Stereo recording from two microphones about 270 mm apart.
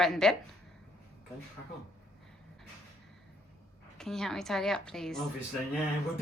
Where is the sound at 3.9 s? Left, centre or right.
Centre.